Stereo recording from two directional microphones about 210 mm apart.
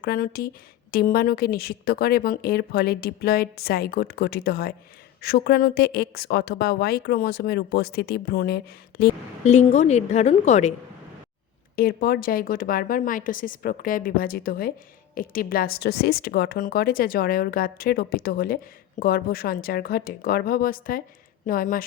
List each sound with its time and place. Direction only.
0.0 s speech: 45° left (ahead or behind)
9.4 s a woman's voice: 30° left (ahead or behind)
11.8 s speech: 45° left (ahead or behind)